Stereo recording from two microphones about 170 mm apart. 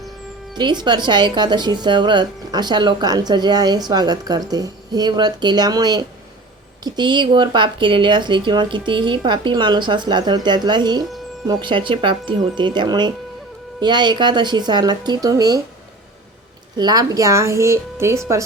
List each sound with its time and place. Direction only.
0.5 s speech: 25° right (ahead or behind)
16.7 s speech: 25° right (ahead or behind)